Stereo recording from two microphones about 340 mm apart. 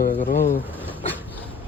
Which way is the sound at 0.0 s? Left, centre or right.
Left.